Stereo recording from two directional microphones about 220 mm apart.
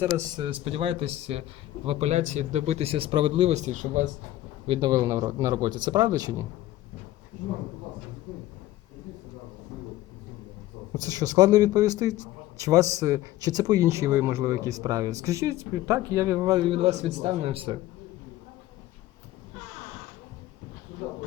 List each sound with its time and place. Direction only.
0.0 s speech: 15° right (ahead or behind); by 4.0 s 35° right (ahead or behind)
4.6 s speech: 20° right (ahead or behind)
11.0 s a man's voice: 15° right (ahead or behind)